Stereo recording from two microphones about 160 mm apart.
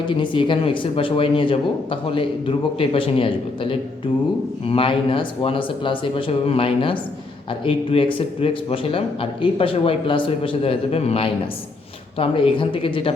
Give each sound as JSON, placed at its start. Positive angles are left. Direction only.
{"t": 0.0, "sound": "speech", "side_deg": 30}